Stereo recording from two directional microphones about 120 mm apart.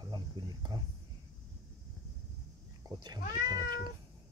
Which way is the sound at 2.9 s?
35° right (ahead or behind).